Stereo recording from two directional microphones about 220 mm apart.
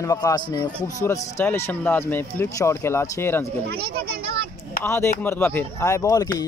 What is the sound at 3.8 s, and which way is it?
Speech, 45° right (ahead or behind).